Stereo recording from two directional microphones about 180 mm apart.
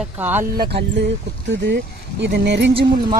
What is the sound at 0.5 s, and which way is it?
Speech, 65° right (ahead or behind).